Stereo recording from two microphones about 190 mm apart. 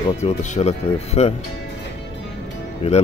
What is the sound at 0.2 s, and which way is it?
Speech, 35° left (ahead or behind).